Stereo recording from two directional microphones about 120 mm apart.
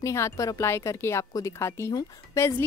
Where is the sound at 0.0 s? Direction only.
25° left (ahead or behind).